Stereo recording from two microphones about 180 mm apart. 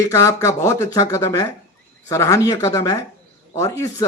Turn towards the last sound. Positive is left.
turn(degrees=15)  # may be behind; listen again after turning